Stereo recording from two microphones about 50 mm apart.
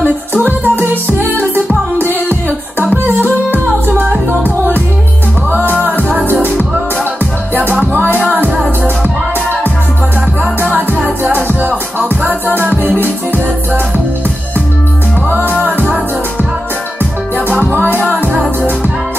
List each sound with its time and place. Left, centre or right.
0.4 s music: right
3.5 s music: right
6.2 s music: right
7.8 s music: right
11.2 s music: right
17.7 s music: right